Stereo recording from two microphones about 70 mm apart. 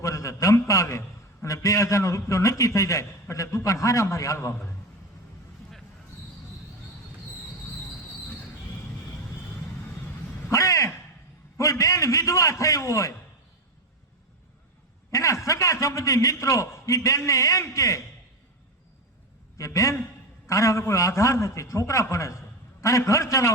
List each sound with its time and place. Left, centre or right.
0.0 s a man's voice: left
4.4 s a man's voice: left
10.5 s a sound: left
11.5 s a man's voice: left
15.1 s a man's voice: left
19.5 s a man's voice: left